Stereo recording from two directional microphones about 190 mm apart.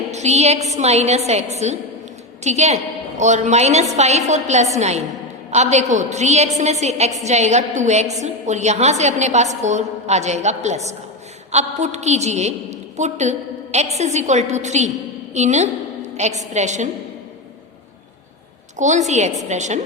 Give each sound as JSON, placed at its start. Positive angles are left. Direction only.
{"t": 0.1, "sound": "a woman's voice", "side_deg": -35}
{"t": 18.8, "sound": "a woman's voice", "side_deg": -40}